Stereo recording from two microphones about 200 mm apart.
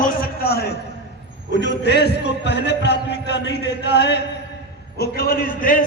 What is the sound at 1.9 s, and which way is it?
A man's voice, 55° left (ahead or behind).